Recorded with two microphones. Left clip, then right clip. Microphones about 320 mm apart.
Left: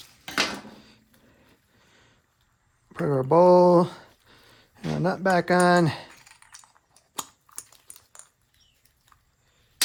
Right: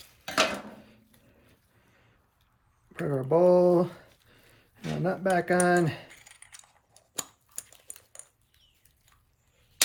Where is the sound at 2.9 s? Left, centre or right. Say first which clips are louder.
Left 5 dB; centre.